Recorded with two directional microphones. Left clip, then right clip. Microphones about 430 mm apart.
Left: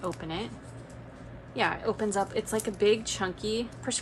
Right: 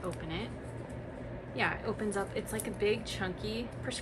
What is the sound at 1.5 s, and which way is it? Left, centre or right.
A woman's voice, centre.